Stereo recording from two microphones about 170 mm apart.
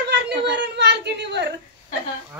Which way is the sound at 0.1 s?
90° right.